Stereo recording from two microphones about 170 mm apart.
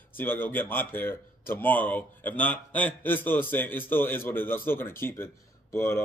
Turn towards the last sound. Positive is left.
turn(degrees=15)  # may be behind; listen again after turning